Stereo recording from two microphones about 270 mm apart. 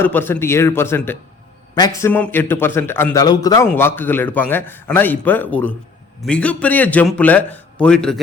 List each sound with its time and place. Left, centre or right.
0.0 s a man's voice: centre